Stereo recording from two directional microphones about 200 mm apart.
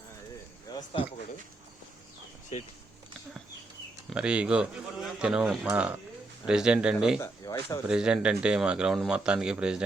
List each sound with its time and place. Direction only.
0.7 s speech: 20° left (ahead or behind)
4.1 s a man's voice: 5° right (ahead or behind)
7.2 s speech: 15° left (ahead or behind)
7.9 s a man's voice: 5° right (ahead or behind)